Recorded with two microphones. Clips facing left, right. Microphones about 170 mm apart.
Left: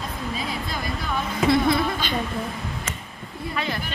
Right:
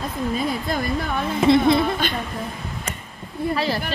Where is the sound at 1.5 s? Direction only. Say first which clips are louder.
Right 4 dB; 25° right (ahead or behind).